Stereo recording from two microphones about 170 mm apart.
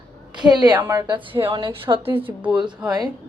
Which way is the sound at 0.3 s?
25° right (ahead or behind).